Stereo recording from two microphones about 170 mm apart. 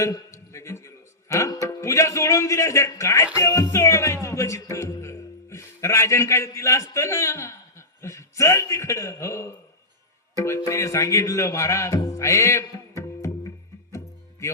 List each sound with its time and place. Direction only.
0.0 s a sound: 20° left (ahead or behind)
1.6 s a man's voice: 15° left (ahead or behind)
13.9 s music: 15° left (ahead or behind)